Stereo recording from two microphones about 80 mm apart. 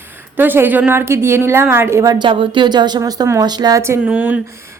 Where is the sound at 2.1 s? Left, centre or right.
Right.